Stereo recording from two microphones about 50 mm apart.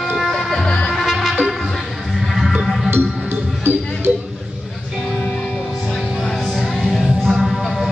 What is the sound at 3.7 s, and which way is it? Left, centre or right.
Music, right.